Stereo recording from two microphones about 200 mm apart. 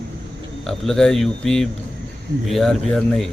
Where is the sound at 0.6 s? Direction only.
Centre (ahead or behind).